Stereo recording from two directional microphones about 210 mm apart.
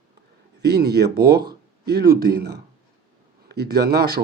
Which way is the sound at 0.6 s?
50° right (ahead or behind).